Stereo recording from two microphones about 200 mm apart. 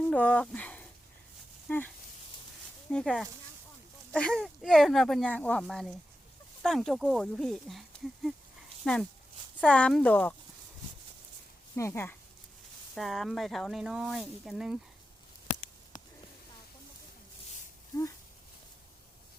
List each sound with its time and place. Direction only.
0.1 s speech: 5° left (ahead or behind)
2.9 s speech: 5° left (ahead or behind)
11.8 s speech: 10° left (ahead or behind)
12.9 s speech: centre (ahead or behind)
17.9 s speech: 15° left (ahead or behind)